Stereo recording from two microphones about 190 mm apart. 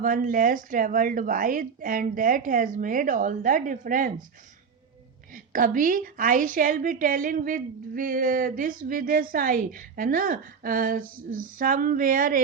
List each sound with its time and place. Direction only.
0.0 s a woman's voice: 45° right (ahead or behind)
5.3 s a woman's voice: 45° right (ahead or behind)